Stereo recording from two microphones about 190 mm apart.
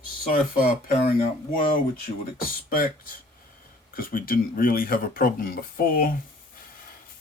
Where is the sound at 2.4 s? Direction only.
50° left (ahead or behind).